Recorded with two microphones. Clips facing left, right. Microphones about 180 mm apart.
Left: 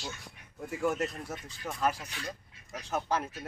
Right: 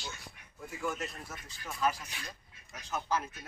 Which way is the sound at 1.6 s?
55° left (ahead or behind).